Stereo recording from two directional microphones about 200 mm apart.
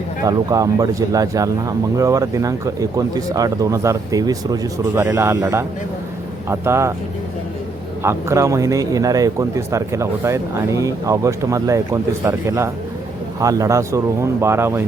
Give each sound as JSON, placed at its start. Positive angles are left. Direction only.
{"t": 0.3, "sound": "speech", "side_deg": -15}
{"t": 8.0, "sound": "speech", "side_deg": -15}